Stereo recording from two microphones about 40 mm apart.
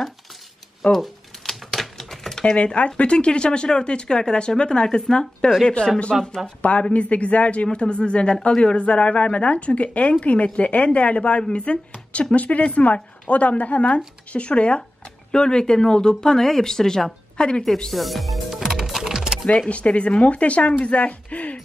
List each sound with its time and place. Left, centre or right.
0.9 s typewriter: centre
2.4 s speech: left
6.6 s speech: left
17.9 s music: centre
18.8 s music: centre
19.7 s speech: left